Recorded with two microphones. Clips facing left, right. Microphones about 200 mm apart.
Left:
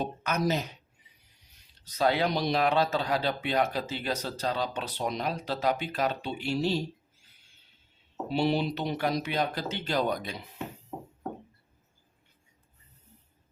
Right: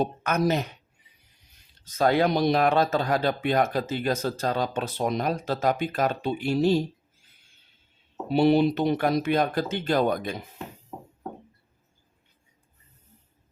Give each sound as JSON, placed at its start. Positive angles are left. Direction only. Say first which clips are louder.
{"t": 0.0, "sound": "a woman's voice", "louder": "right 5 dB", "side_deg": -55}
{"t": 1.8, "sound": "speech", "louder": "right 5 dB", "side_deg": -45}
{"t": 8.3, "sound": "speech", "louder": "right 7 dB", "side_deg": -55}